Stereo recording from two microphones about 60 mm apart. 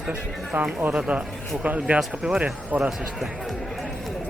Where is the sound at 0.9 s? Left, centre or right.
Centre.